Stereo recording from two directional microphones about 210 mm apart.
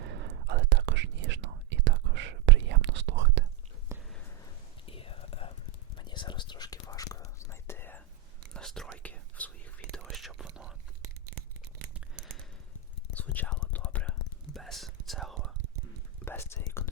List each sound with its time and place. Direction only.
0.0 s whispering: 55° right (ahead or behind)
3.9 s whispering: 15° right (ahead or behind)
4.9 s whispering: 25° left (ahead or behind); by 10.8 s 5° right (ahead or behind)
13.1 s whispering: 10° left (ahead or behind)
16.2 s whispering: 10° left (ahead or behind)